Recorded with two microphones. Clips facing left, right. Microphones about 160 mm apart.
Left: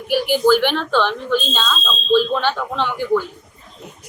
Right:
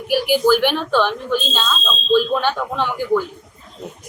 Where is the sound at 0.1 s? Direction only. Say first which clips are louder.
Even; 10° right (ahead or behind).